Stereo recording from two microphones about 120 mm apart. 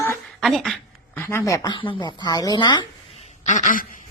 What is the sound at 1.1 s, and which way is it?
Speech, 20° left (ahead or behind).